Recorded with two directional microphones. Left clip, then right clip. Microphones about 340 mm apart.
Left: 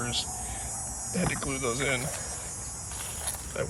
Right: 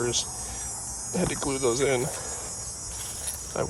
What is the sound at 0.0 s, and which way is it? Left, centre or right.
Hum, centre.